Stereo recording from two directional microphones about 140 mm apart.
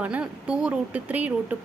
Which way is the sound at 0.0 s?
10° right (ahead or behind).